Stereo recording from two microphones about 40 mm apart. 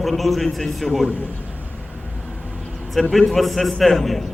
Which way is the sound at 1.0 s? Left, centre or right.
Right.